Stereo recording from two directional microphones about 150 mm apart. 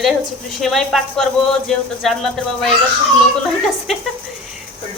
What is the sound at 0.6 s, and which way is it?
Speech, centre (ahead or behind).